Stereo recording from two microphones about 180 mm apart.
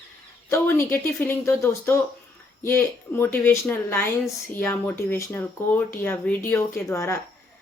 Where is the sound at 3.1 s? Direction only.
10° left (ahead or behind).